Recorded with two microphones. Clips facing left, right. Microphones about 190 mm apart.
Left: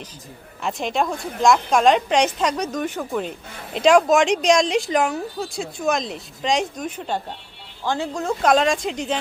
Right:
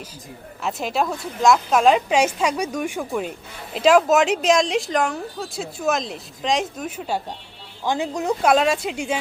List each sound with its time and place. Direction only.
0.6 s speech: 5° right (ahead or behind)
8.4 s speech: 5° right (ahead or behind)